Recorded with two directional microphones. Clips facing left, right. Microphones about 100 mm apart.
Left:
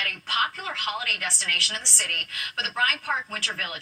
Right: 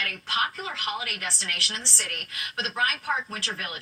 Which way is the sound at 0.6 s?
5° right (ahead or behind).